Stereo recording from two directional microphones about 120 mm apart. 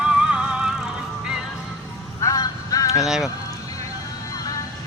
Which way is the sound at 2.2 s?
30° left (ahead or behind).